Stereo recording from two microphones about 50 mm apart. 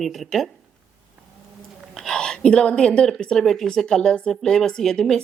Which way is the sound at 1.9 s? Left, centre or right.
Centre.